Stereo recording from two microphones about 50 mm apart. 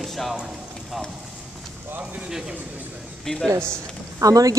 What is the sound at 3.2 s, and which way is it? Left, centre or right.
Speech, centre.